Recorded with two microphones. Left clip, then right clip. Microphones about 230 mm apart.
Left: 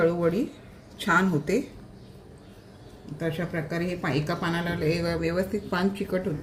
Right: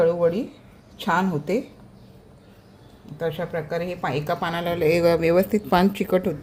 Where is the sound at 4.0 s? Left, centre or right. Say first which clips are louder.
Right 4 dB; right.